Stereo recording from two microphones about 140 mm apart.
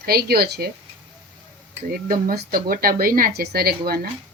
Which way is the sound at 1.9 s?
90° right.